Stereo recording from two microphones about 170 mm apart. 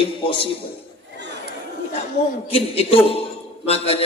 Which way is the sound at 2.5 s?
35° left (ahead or behind).